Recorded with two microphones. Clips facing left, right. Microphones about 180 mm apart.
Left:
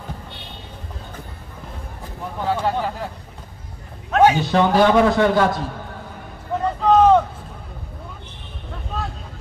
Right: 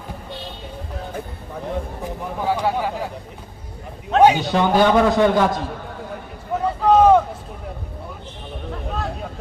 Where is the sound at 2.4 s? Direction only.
10° right (ahead or behind).